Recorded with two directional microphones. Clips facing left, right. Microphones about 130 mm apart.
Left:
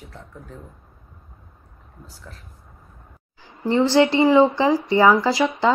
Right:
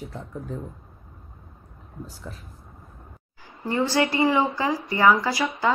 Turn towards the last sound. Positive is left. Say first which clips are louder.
# left 5 dB
turn(degrees=25)  # may be behind; listen again after turning